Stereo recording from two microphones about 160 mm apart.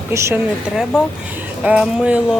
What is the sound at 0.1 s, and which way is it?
Speech, 15° right (ahead or behind).